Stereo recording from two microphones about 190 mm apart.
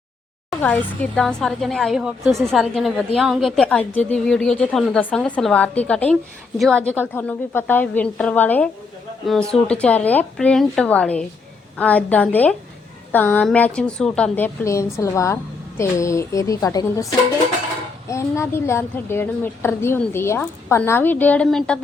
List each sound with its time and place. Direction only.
0.6 s a woman's voice: 10° left (ahead or behind)
18.1 s a woman's voice: 15° left (ahead or behind)